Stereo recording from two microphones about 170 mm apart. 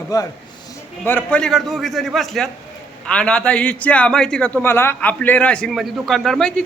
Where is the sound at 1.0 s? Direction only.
10° left (ahead or behind).